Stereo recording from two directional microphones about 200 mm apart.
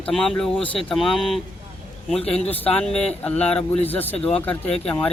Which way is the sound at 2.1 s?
30° left (ahead or behind).